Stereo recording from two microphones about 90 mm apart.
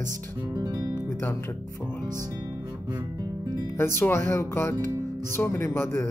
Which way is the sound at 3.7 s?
25° left (ahead or behind).